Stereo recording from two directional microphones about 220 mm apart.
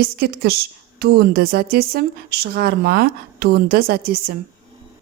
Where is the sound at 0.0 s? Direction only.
45° right (ahead or behind).